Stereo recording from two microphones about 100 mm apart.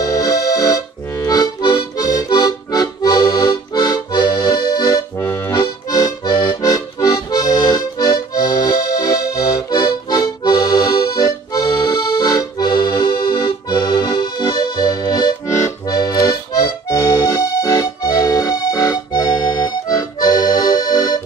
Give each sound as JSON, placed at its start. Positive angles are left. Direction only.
{"t": 0.0, "sound": "accordion", "side_deg": 35}
{"t": 5.2, "sound": "accordion", "side_deg": 25}
{"t": 6.6, "sound": "accordion", "side_deg": 35}
{"t": 9.8, "sound": "accordion", "side_deg": 45}
{"t": 15.4, "sound": "accordion", "side_deg": 30}
{"t": 15.9, "sound": "accordion", "side_deg": 45}